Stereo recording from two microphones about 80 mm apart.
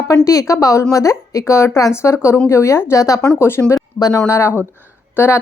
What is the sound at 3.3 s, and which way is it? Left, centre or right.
Speech, left.